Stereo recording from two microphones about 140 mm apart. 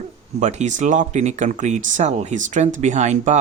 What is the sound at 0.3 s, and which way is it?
Speech, 55° right (ahead or behind).